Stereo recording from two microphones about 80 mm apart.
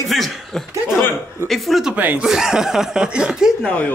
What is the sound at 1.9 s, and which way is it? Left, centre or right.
Speech, right.